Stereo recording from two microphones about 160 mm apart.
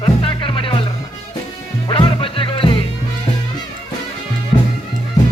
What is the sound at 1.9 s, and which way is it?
Music, 35° left (ahead or behind).